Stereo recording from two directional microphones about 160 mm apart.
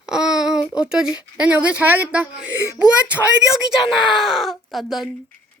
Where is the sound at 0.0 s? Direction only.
5° right (ahead or behind).